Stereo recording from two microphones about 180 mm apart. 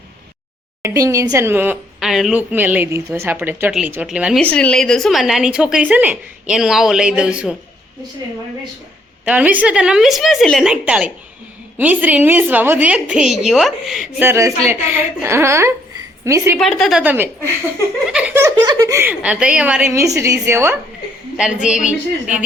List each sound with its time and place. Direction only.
0.8 s speech: 15° right (ahead or behind)
4.4 s a woman's voice: 5° left (ahead or behind)
9.2 s a woman's voice: 10° right (ahead or behind)
14.2 s speech: 15° right (ahead or behind)
16.6 s a woman's voice: centre (ahead or behind)
17.0 s speech: 10° right (ahead or behind)
21.3 s a woman's voice: 5° right (ahead or behind)